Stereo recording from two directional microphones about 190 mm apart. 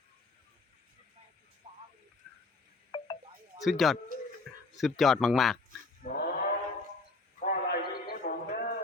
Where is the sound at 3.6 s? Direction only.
Centre (ahead or behind).